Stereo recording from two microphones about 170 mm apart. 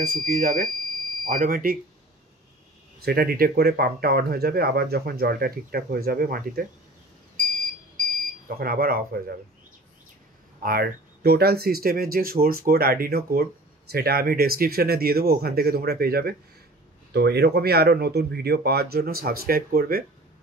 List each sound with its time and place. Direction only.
0.0 s speech: 55° right (ahead or behind)
3.0 s speech: 65° right (ahead or behind)
8.5 s speech: 60° right (ahead or behind)
10.6 s speech: 65° right (ahead or behind)